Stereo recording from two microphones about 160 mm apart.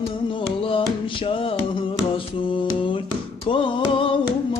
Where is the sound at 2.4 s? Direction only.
30° left (ahead or behind).